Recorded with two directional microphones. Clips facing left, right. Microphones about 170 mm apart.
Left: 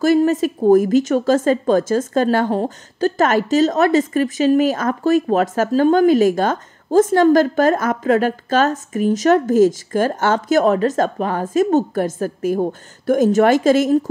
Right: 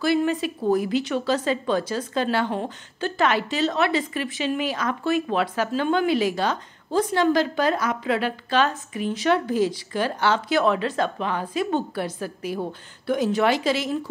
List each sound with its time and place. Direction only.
0.0 s a woman's voice: 45° left (ahead or behind)